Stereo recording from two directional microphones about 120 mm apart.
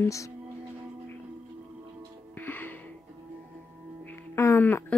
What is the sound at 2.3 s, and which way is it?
Music, 15° left (ahead or behind).